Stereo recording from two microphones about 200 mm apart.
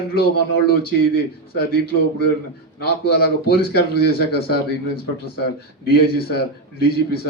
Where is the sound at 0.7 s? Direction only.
50° left (ahead or behind).